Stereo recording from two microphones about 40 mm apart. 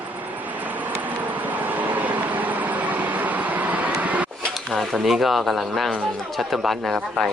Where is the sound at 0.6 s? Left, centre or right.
Right.